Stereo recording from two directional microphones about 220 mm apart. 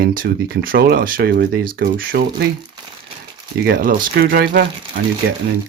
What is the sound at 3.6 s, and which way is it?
Speech, 40° right (ahead or behind).